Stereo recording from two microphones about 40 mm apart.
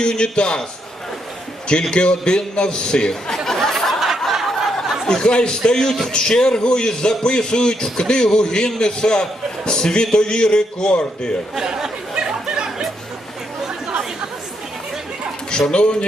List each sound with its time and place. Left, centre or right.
0.0 s a man's voice: left
1.6 s a man's voice: left
3.3 s chatter: centre
5.0 s a man's voice: left
11.5 s chatter: centre
15.4 s speech: left